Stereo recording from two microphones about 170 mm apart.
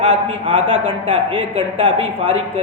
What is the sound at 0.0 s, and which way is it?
Speech, 35° right (ahead or behind).